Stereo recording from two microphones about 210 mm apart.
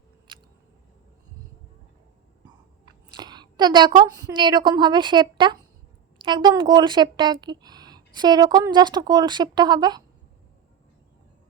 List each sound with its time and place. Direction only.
3.2 s a woman's voice: 20° right (ahead or behind)